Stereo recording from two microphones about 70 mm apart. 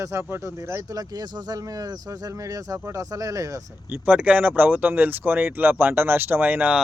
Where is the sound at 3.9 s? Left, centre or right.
Right.